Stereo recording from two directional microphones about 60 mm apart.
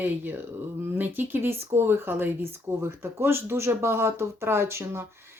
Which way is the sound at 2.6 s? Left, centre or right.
Right.